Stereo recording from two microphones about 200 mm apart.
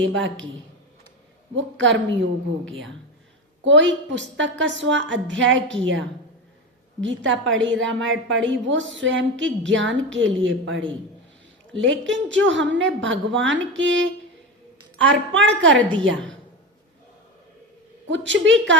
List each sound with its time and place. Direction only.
0.0 s a woman's voice: 70° right (ahead or behind)
1.5 s a woman's voice: 65° right (ahead or behind)
18.1 s a woman's voice: 65° right (ahead or behind)